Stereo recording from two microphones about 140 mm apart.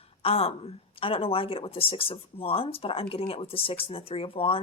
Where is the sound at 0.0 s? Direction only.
45° left (ahead or behind).